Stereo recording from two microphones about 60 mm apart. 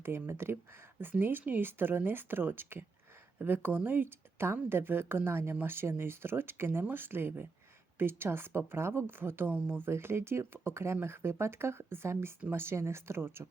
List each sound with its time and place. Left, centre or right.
0.3 s speech: right
9.5 s speech: right
9.9 s speech: right